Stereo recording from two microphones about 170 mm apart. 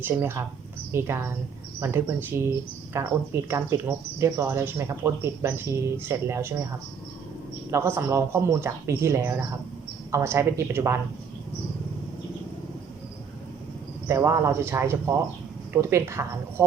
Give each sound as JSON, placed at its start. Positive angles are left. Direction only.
{"t": 0.0, "sound": "speech", "side_deg": -15}
{"t": 7.7, "sound": "speech", "side_deg": -15}
{"t": 14.1, "sound": "speech", "side_deg": -20}